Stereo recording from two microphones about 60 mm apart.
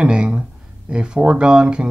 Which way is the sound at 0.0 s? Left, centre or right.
Centre.